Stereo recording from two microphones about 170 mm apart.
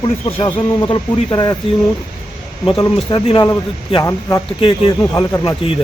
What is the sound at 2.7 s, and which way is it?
Speech, 30° left (ahead or behind).